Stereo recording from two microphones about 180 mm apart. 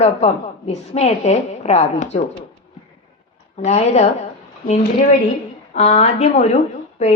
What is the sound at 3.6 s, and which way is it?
Speech, 40° left (ahead or behind).